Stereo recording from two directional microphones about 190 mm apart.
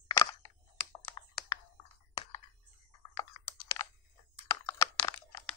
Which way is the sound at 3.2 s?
20° left (ahead or behind).